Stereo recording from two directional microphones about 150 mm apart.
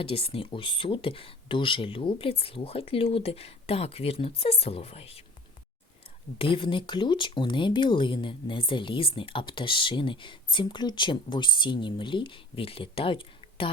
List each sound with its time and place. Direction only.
0.0 s speech: 40° left (ahead or behind)
6.4 s speech: 35° left (ahead or behind)